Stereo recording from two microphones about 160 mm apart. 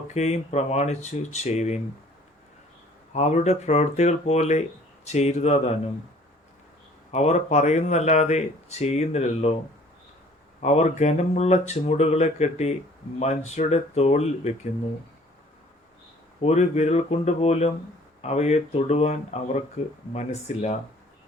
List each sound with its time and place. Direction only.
0.1 s speech: 45° left (ahead or behind)
3.1 s speech: 45° left (ahead or behind)
7.1 s speech: 45° left (ahead or behind)
10.6 s speech: 45° left (ahead or behind)
16.4 s speech: 40° left (ahead or behind)